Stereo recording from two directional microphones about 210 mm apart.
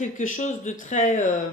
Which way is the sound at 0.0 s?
40° left (ahead or behind).